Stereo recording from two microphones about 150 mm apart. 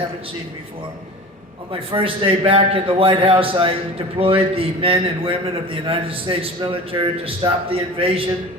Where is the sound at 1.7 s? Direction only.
35° right (ahead or behind).